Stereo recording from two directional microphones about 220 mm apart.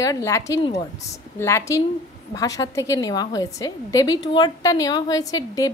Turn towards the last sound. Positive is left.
turn(degrees=15)  # may be behind; listen again after turning